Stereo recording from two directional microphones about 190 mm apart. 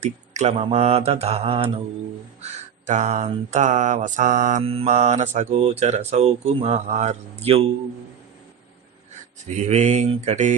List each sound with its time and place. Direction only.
0.0 s speech: 35° right (ahead or behind)
4.6 s speech: 30° right (ahead or behind)
9.6 s speech: 40° right (ahead or behind)